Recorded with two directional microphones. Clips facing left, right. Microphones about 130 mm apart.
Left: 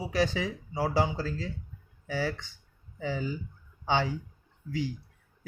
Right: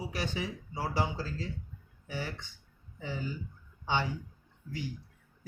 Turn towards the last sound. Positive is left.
turn(degrees=90)